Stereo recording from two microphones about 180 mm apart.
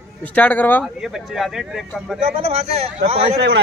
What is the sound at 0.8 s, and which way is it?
Speech, centre (ahead or behind).